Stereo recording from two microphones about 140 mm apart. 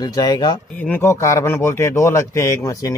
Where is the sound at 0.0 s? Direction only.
30° left (ahead or behind).